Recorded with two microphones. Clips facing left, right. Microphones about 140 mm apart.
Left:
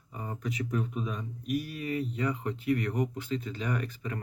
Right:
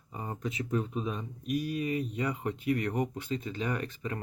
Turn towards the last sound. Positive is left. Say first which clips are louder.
# even
turn(degrees=-25)  # may be behind; listen again after turning